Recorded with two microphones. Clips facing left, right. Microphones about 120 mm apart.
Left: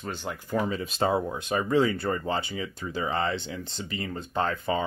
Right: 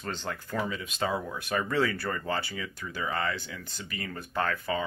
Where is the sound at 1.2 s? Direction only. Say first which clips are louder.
Left 3 dB; 20° left (ahead or behind).